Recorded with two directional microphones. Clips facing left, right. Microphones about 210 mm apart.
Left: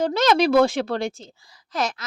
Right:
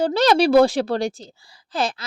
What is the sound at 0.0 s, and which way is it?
A woman's voice, 35° right (ahead or behind).